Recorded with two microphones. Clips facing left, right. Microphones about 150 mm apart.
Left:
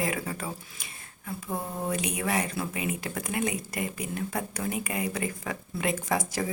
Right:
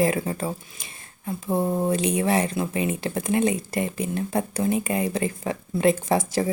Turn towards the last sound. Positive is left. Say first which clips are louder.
# right 6 dB
turn(degrees=-30)  # may be behind; listen again after turning